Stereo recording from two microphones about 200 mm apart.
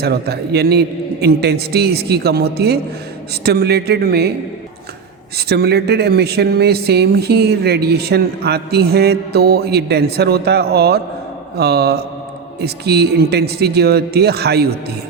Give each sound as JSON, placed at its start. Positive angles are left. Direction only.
{"t": 0.0, "sound": "speech", "side_deg": -55}
{"t": 5.4, "sound": "speech", "side_deg": -55}